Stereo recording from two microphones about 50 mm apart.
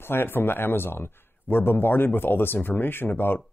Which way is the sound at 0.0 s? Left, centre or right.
Left.